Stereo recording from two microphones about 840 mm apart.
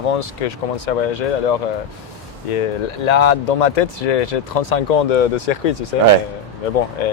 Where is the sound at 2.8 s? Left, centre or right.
Left.